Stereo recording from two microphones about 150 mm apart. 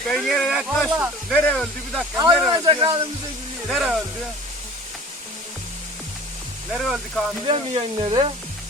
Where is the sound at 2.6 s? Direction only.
30° right (ahead or behind).